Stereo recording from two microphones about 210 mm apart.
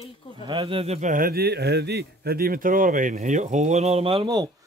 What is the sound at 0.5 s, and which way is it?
A man's voice, 25° right (ahead or behind).